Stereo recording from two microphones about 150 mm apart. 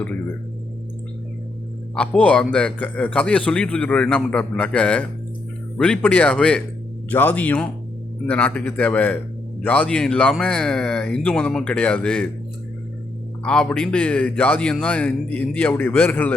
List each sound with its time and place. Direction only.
2.0 s a man's voice: 5° left (ahead or behind)
13.4 s a man's voice: 5° left (ahead or behind)